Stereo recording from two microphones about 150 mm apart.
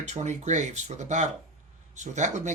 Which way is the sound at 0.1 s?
50° right (ahead or behind).